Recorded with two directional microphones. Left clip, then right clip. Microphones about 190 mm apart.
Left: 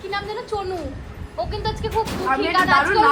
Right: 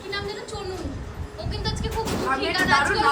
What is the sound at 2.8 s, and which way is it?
Speech, 30° left (ahead or behind).